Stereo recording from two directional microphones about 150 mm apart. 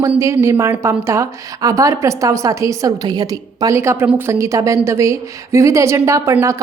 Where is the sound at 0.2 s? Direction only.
20° right (ahead or behind).